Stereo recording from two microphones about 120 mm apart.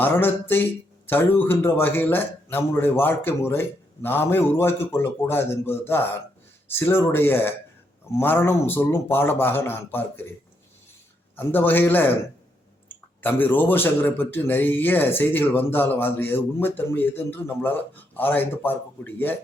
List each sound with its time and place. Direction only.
0.0 s a man's voice: 15° left (ahead or behind)
11.3 s a man's voice: 15° left (ahead or behind)
13.2 s a man's voice: 15° left (ahead or behind)